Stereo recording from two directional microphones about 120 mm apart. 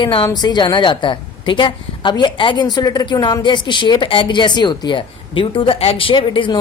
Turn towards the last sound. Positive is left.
turn(degrees=40)  # may be behind; listen again after turning